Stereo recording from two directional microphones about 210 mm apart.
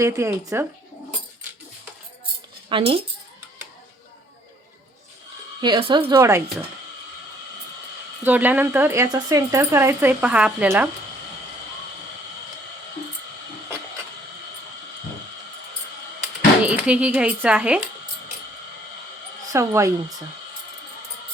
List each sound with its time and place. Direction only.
0.0 s speech: 10° right (ahead or behind)
2.6 s speech: 25° right (ahead or behind)
5.6 s speech: 20° right (ahead or behind)
8.2 s speech: 10° right (ahead or behind)
16.6 s speech: 5° right (ahead or behind)
19.5 s speech: 15° right (ahead or behind)